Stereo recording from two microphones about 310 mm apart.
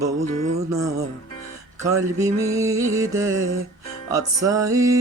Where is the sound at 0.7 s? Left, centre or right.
Centre.